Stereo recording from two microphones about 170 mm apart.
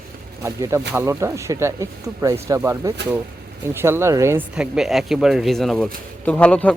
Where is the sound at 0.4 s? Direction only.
15° right (ahead or behind).